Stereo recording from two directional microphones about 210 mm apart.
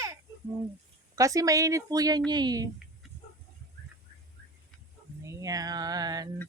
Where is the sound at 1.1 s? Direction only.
15° right (ahead or behind).